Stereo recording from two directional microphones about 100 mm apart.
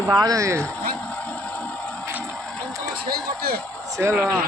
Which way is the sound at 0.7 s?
15° left (ahead or behind).